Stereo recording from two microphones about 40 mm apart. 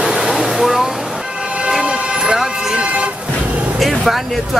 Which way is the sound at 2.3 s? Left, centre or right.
Centre.